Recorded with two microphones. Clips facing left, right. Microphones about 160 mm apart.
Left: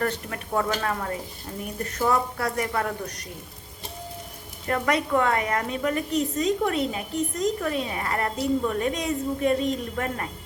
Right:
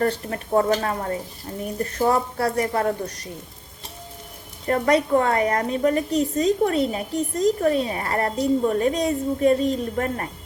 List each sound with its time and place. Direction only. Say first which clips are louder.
0.0 s a woman's voice: right 5 dB; 30° right (ahead or behind)
4.6 s a woman's voice: right 5 dB; 35° right (ahead or behind)